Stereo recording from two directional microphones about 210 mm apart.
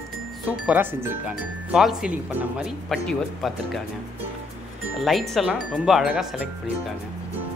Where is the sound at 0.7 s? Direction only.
10° right (ahead or behind).